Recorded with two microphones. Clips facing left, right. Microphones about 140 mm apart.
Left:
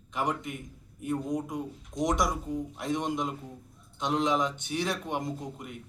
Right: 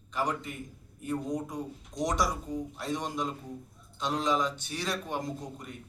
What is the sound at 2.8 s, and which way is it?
Speech, 20° left (ahead or behind).